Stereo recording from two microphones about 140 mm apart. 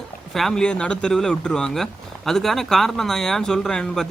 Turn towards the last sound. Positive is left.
turn(degrees=5)  # may be behind; listen again after turning